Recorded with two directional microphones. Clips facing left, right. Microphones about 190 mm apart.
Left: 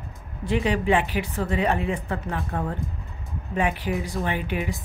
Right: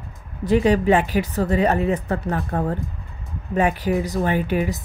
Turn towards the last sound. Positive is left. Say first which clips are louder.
# right 6 dB
turn(degrees=-40)  # may be behind; listen again after turning